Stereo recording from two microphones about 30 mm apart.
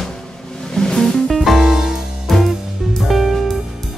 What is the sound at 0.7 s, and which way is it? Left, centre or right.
Music, centre.